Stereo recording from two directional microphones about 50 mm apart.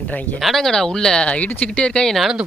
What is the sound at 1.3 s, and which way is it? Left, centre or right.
Speech, left.